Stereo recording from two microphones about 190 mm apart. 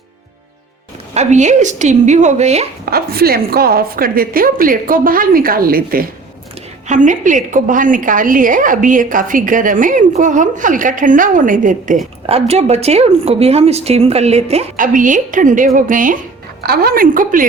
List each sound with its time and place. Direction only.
1.1 s a woman's voice: 35° right (ahead or behind)
2.8 s a woman's voice: 55° right (ahead or behind)
12.2 s a woman's voice: 35° right (ahead or behind)